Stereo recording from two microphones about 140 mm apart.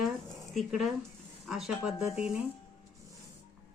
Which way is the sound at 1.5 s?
5° right (ahead or behind).